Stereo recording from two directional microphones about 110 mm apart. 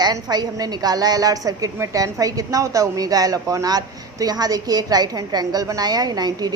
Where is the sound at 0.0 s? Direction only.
40° right (ahead or behind).